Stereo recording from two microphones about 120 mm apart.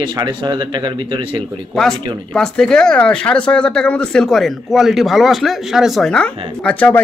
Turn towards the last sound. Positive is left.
turn(degrees=10)  # may be behind; listen again after turning